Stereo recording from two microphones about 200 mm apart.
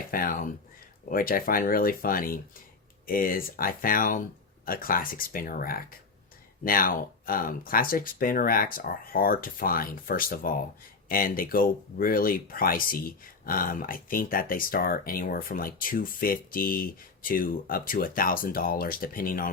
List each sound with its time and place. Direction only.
0.1 s speech: 45° left (ahead or behind)